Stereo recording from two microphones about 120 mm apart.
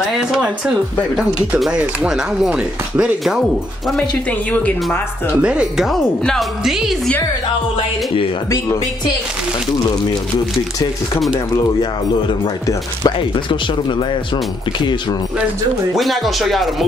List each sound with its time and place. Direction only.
1.6 s speech: 5° right (ahead or behind)
4.3 s speech: 10° left (ahead or behind)
5.4 s speech: 10° right (ahead or behind)
11.3 s speech: 30° left (ahead or behind)
15.9 s speech: centre (ahead or behind)